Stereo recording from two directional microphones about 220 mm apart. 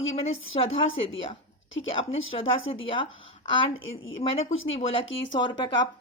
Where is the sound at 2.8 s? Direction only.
25° left (ahead or behind).